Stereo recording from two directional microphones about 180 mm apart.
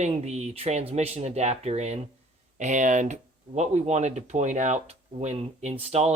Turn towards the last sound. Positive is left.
turn(degrees=-35)  # may be behind; listen again after turning